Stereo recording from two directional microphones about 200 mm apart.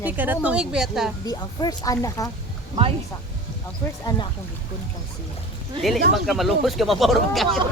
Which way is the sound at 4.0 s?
20° left (ahead or behind).